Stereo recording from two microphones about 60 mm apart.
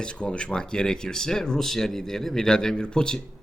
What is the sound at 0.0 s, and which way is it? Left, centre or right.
Speech, centre.